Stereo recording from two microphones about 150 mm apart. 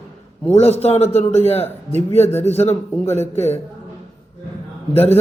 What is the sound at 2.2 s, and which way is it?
Speech, 15° left (ahead or behind).